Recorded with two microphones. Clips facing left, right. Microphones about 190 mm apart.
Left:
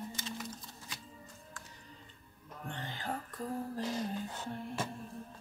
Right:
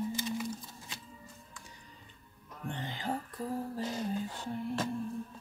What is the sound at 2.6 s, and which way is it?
Music, 15° right (ahead or behind).